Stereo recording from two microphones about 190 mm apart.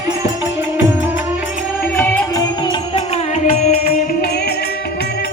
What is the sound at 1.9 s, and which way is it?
Music, 10° left (ahead or behind).